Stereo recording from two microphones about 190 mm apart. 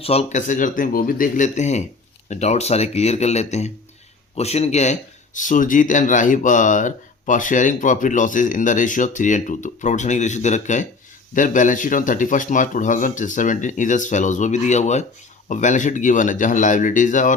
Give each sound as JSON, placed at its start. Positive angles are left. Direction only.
{"t": 0.0, "sound": "speech", "side_deg": 30}